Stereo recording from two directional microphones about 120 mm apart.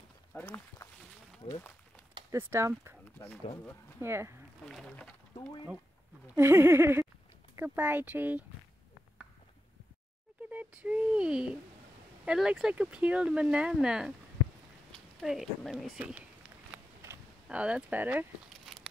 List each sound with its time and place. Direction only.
0.3 s speech: 20° left (ahead or behind)
2.3 s speech: 20° right (ahead or behind)
4.0 s speech: 20° right (ahead or behind)
4.6 s speech: centre (ahead or behind)
6.2 s speech: 20° right (ahead or behind)
10.5 s speech: 10° right (ahead or behind)
16.0 s speech: 15° right (ahead or behind)
17.0 s a sound: 20° right (ahead or behind)
17.5 s speech: 10° right (ahead or behind)